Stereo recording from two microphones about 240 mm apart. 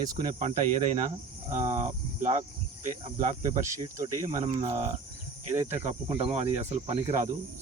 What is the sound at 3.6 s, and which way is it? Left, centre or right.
Speech, centre.